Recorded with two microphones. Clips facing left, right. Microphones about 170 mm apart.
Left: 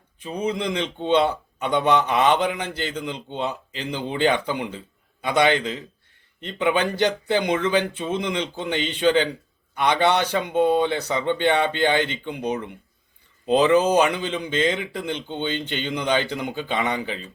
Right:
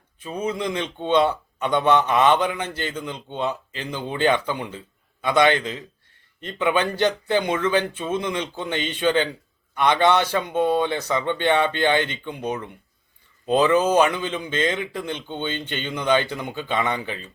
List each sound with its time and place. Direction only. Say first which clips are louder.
0.3 s speech: left 1 dB; 15° left (ahead or behind)